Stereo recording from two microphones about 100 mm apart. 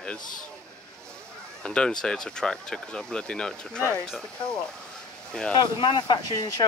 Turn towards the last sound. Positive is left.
turn(degrees=40)  # may be behind; listen again after turning